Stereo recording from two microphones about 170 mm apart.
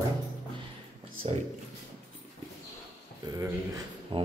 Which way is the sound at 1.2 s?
35° right (ahead or behind).